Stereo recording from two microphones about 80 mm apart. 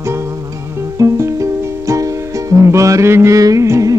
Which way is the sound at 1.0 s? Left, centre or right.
Right.